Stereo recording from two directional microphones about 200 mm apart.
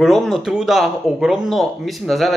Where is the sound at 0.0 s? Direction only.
Centre (ahead or behind).